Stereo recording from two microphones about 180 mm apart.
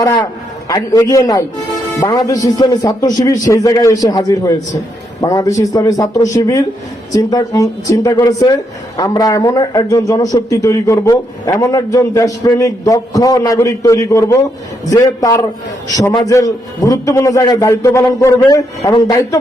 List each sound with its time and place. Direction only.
0.0 s a man's voice: 20° left (ahead or behind)